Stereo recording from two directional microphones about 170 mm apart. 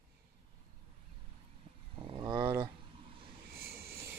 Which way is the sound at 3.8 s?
15° right (ahead or behind).